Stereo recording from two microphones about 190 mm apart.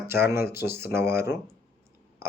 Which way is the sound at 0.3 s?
15° right (ahead or behind).